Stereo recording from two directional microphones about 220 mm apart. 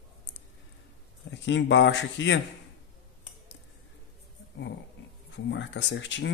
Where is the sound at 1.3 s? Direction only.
55° left (ahead or behind).